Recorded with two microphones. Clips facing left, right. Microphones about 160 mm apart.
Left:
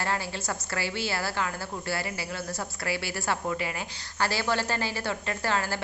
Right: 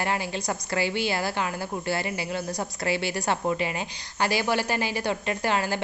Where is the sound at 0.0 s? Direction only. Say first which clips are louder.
Right 3 dB; 15° right (ahead or behind).